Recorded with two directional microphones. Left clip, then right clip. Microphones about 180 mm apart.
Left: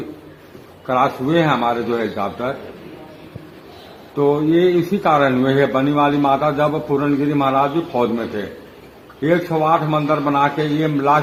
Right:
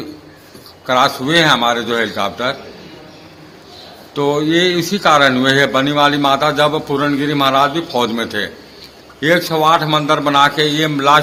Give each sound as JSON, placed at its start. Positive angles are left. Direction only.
{"t": 0.9, "sound": "speech", "side_deg": -10}
{"t": 4.2, "sound": "speech", "side_deg": -10}
{"t": 9.2, "sound": "a man's voice", "side_deg": -15}